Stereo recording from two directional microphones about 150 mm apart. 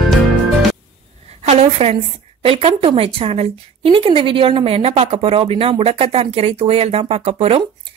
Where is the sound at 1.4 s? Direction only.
45° right (ahead or behind).